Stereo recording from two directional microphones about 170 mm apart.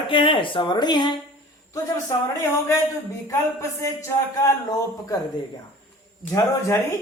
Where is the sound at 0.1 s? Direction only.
30° left (ahead or behind).